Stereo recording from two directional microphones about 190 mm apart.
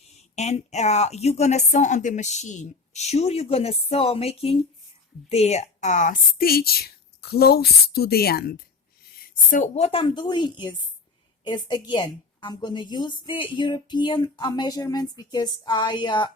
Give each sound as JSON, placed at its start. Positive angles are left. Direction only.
{"t": 0.1, "sound": "speech", "side_deg": 35}
{"t": 9.2, "sound": "a woman's voice", "side_deg": 45}